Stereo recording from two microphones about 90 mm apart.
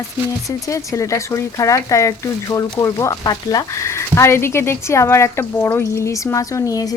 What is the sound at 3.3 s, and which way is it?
Speech, 45° left (ahead or behind).